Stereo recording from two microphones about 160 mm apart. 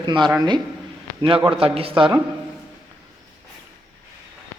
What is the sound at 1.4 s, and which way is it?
Speech, 35° right (ahead or behind).